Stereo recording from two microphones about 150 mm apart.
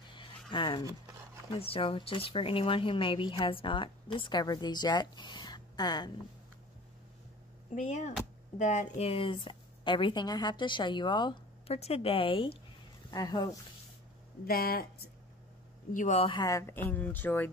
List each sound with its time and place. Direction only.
0.1 s a sound: 35° left (ahead or behind)
0.8 s a sound: 20° right (ahead or behind)
1.5 s speech: 35° left (ahead or behind)
7.7 s speech: 50° left (ahead or behind)
13.1 s speech: 25° left (ahead or behind)
14.4 s speech: 80° left
15.9 s speech: 55° left (ahead or behind)
16.2 s speech: 35° left (ahead or behind)
16.4 s speech: 20° left (ahead or behind)